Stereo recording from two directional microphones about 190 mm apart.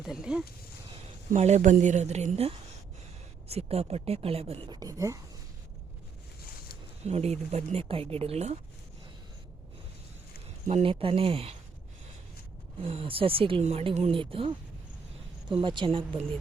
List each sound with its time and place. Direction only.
0.0 s speech: 5° right (ahead or behind)
1.3 s speech: 35° right (ahead or behind); by 5.2 s 15° right (ahead or behind)
7.0 s speech: 35° right (ahead or behind)
10.7 s speech: 30° right (ahead or behind)
12.8 s speech: 30° right (ahead or behind)